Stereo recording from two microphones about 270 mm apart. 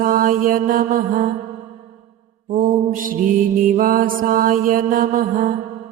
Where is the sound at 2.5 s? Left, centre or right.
Right.